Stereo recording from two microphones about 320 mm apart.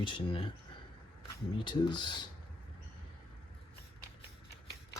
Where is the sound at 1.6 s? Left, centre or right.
Centre.